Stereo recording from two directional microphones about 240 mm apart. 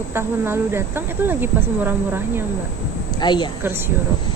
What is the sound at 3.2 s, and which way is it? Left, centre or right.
Speech, centre.